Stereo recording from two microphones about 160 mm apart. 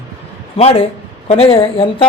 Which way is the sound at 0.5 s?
40° left (ahead or behind).